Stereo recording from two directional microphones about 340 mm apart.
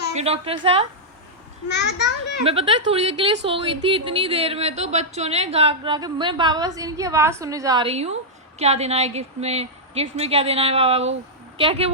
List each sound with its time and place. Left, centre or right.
0.1 s a woman's voice: centre
1.6 s a child's voice: left
2.4 s a woman's voice: centre